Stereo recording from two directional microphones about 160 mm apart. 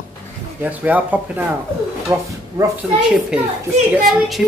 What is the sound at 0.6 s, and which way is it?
Speech, 10° right (ahead or behind).